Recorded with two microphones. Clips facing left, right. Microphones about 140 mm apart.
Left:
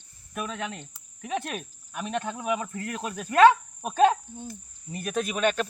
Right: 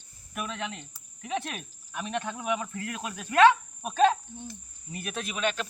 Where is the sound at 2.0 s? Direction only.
35° left (ahead or behind).